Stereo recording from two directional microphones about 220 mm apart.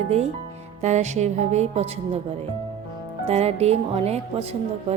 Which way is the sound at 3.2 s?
30° right (ahead or behind).